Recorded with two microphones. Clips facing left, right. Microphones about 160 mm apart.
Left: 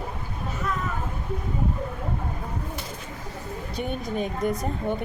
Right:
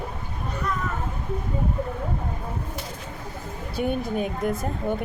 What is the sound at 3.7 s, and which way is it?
Speech, 5° right (ahead or behind).